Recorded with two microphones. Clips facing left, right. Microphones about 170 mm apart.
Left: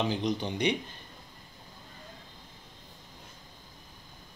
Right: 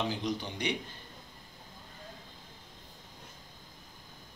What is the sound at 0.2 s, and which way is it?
Speech, 20° left (ahead or behind).